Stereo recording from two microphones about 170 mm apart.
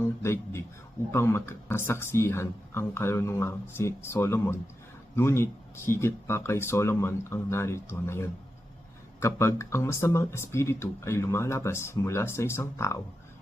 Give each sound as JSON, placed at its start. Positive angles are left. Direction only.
{"t": 0.2, "sound": "speech", "side_deg": 15}